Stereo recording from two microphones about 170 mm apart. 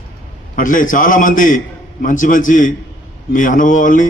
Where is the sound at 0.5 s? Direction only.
50° left (ahead or behind).